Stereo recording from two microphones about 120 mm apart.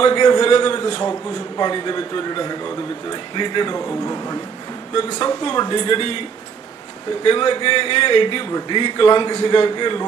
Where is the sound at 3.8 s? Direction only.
25° left (ahead or behind).